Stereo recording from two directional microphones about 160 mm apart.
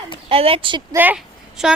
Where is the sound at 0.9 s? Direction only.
10° right (ahead or behind).